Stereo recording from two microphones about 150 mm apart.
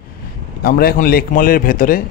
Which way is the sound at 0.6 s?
85° left.